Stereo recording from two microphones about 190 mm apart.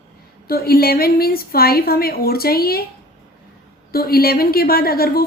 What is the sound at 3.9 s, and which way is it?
A woman's voice, 55° left (ahead or behind).